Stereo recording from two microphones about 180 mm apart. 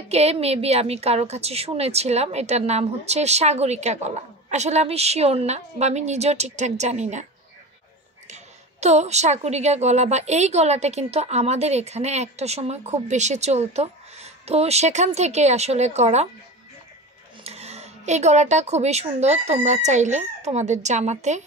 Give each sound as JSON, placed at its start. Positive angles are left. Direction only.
{"t": 0.1, "sound": "a woman's voice", "side_deg": -35}
{"t": 8.3, "sound": "a woman's voice", "side_deg": -40}
{"t": 17.4, "sound": "a woman's voice", "side_deg": -35}